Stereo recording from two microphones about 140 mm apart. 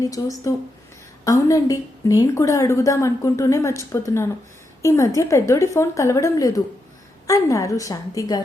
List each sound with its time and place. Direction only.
0.0 s a woman's voice: 25° left (ahead or behind)